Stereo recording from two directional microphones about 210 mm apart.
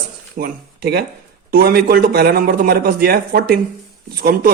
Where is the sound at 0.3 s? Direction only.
45° right (ahead or behind).